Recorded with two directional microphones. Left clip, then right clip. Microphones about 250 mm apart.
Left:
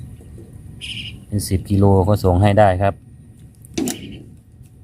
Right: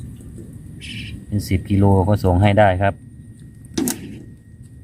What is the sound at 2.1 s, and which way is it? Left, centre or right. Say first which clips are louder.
Speech: left 1 dB; centre.